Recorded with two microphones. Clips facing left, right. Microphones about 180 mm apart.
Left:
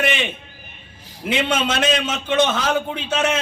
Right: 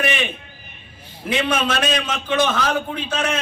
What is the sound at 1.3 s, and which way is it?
A man's voice, 20° left (ahead or behind).